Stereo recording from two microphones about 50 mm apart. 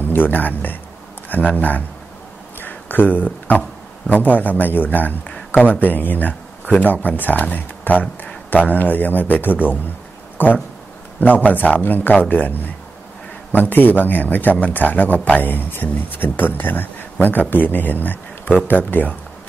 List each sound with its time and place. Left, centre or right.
0.0 s speech: left
2.6 s a sound: left
4.1 s speech: left